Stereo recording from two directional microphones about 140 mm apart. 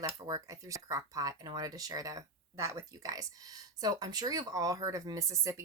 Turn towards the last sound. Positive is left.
turn(degrees=-20)  # may be behind; listen again after turning